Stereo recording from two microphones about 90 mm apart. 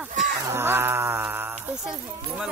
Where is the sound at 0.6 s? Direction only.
25° right (ahead or behind).